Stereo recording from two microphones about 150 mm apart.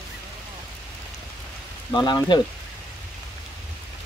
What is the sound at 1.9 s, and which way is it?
Speech, 25° left (ahead or behind).